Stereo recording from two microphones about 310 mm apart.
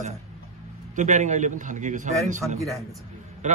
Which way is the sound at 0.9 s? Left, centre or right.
Right.